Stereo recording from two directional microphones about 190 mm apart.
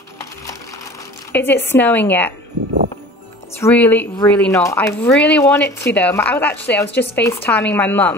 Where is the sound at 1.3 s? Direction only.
10° left (ahead or behind).